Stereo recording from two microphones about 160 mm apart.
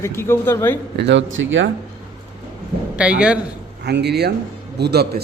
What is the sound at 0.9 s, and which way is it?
Speech, 90° right.